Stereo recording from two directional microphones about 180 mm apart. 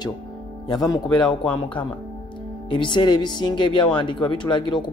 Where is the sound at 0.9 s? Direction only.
20° left (ahead or behind).